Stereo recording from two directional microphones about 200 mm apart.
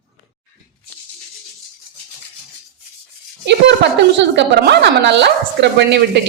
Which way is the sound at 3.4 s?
60° right (ahead or behind).